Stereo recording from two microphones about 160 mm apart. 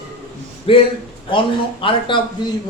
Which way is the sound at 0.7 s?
35° left (ahead or behind).